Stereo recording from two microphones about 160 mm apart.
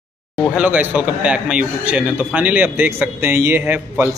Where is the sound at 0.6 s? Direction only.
10° right (ahead or behind).